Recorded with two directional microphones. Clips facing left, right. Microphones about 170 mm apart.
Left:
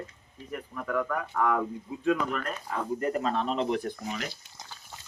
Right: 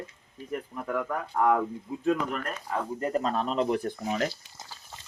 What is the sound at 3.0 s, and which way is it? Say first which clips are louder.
Speech: right 1 dB; 35° right (ahead or behind).